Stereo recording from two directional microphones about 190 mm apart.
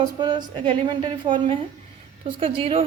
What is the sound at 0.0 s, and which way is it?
A woman's voice, 25° right (ahead or behind).